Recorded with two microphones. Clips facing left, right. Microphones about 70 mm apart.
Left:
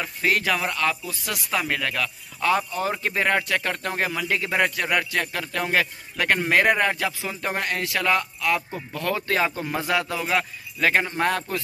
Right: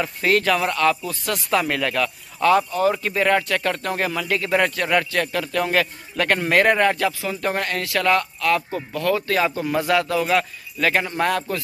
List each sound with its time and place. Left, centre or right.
0.0 s a man's voice: centre
2.7 s a man's voice: left
5.1 s a man's voice: centre
8.9 s speech: left